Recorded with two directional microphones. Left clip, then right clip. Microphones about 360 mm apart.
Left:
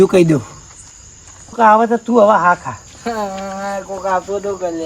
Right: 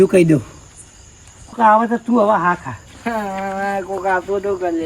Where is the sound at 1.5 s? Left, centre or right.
Centre.